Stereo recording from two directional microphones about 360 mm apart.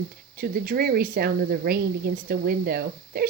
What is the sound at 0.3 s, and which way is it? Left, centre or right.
Speech, right.